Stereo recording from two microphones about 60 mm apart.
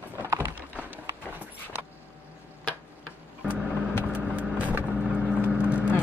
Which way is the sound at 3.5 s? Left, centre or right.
Centre.